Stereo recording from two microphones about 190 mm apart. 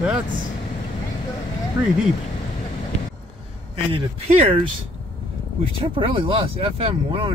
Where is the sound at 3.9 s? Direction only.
30° right (ahead or behind).